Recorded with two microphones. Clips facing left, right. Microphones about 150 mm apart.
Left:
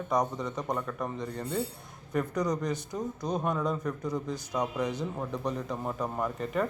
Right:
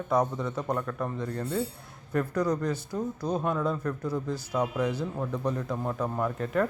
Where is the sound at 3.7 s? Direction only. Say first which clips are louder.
Right 1 dB; 10° left (ahead or behind).